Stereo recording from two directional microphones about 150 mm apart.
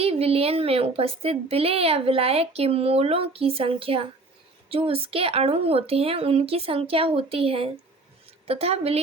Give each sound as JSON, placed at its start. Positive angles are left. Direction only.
{"t": 0.0, "sound": "a woman's voice", "side_deg": -40}